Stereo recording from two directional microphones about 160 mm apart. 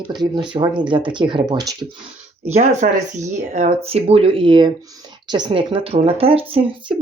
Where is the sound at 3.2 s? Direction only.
45° right (ahead or behind).